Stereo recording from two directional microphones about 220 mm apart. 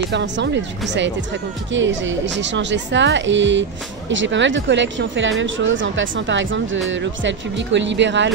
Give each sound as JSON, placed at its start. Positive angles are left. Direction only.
{"t": 0.1, "sound": "speech", "side_deg": -50}